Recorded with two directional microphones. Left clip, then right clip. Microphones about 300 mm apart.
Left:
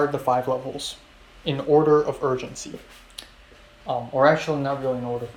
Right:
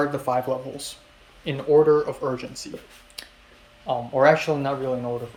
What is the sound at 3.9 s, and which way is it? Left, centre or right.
Speech, centre.